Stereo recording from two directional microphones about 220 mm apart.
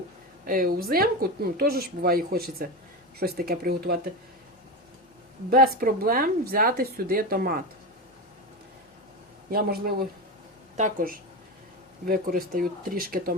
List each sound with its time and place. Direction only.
0.4 s a woman's voice: 40° right (ahead or behind)
5.7 s a woman's voice: 40° right (ahead or behind)
9.5 s a woman's voice: 45° right (ahead or behind)